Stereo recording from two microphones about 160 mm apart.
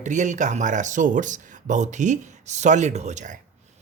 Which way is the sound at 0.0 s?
50° right (ahead or behind).